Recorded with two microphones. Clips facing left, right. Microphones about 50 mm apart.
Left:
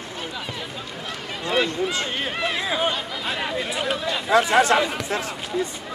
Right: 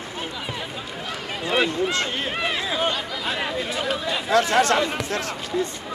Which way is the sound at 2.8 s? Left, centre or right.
Centre.